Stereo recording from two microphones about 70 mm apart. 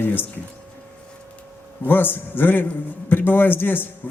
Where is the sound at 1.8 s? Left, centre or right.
Left.